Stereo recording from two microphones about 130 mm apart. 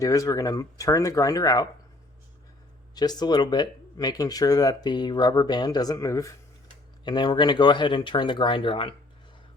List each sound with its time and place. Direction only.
0.0 s speech: 25° left (ahead or behind)
2.9 s speech: 30° left (ahead or behind)
7.0 s speech: 35° left (ahead or behind)